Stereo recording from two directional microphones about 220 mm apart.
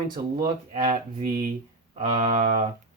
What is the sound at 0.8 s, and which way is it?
Speech, 40° right (ahead or behind).